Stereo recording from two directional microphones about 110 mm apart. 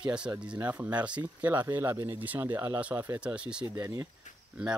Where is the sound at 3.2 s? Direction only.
10° right (ahead or behind).